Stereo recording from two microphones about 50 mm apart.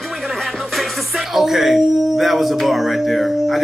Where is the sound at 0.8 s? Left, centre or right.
Centre.